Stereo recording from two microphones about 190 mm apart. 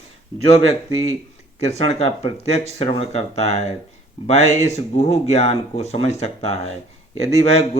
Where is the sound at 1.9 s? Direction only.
35° left (ahead or behind).